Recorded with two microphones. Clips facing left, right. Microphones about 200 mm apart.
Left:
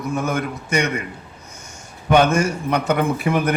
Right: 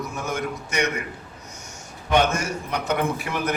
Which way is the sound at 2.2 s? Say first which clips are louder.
Left 7 dB; 55° left (ahead or behind).